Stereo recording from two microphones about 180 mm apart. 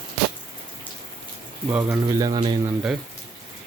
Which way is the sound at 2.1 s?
20° right (ahead or behind).